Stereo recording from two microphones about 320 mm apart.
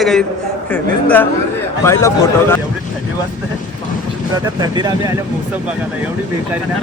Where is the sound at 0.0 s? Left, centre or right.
Centre.